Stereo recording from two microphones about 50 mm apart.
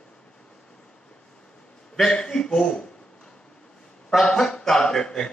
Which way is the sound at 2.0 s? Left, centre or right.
Centre.